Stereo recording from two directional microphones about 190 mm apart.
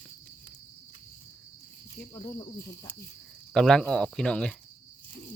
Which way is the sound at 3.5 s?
5° left (ahead or behind).